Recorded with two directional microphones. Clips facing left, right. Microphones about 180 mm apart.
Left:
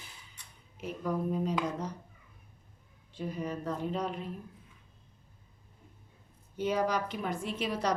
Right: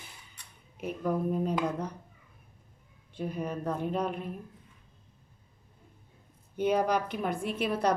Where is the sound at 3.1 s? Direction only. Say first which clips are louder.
Right 2 dB; 60° right (ahead or behind).